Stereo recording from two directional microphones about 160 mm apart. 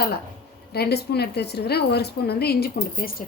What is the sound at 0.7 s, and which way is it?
A woman's voice, 85° left.